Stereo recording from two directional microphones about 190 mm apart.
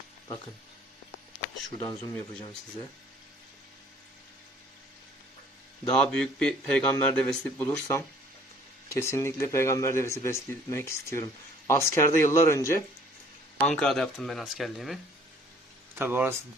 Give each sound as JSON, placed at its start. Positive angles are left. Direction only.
{"t": 1.8, "sound": "speech", "side_deg": 20}
{"t": 6.0, "sound": "speech", "side_deg": 5}
{"t": 16.0, "sound": "speech", "side_deg": -10}